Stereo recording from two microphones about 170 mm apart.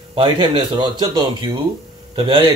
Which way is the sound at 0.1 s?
30° right (ahead or behind).